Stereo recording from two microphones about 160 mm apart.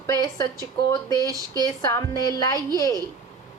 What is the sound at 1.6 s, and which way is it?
A woman's voice, 25° left (ahead or behind).